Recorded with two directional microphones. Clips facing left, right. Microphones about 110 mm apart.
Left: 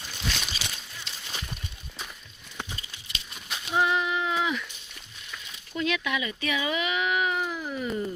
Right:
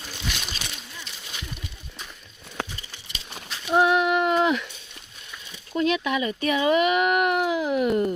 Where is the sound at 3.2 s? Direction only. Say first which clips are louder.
Right 5 dB; 70° right (ahead or behind).